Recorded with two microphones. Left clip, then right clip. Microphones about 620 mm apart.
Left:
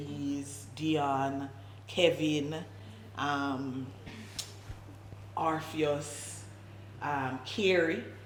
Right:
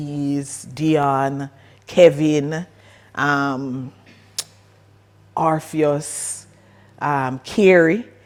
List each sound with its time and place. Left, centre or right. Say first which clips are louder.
0.1 s a sound: right 14 dB; right
1.9 s speech: right 15 dB; right
3.2 s speech: right 13 dB; right
4.4 s music: right 12 dB; right
5.4 s speech: right 13 dB; right
7.0 s speech: right 13 dB; right